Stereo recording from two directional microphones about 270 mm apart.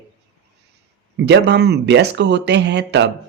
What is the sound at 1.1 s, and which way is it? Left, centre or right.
Speech, right.